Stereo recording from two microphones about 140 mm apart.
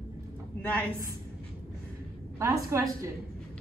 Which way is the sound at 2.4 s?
20° right (ahead or behind).